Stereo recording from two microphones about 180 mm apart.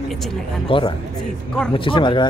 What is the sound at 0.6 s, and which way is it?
Speech, 30° left (ahead or behind).